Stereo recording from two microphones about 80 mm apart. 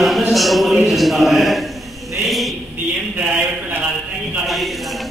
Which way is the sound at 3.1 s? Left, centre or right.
Right.